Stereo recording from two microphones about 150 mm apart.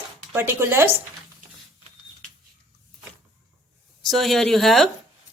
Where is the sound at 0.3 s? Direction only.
15° right (ahead or behind).